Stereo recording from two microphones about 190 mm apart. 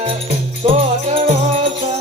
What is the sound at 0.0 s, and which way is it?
Music, 30° right (ahead or behind).